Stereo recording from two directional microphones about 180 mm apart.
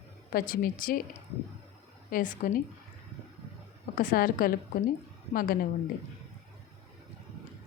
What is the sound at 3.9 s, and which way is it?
Speech, 50° left (ahead or behind).